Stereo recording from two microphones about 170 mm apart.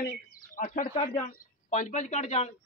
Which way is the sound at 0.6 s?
55° left (ahead or behind).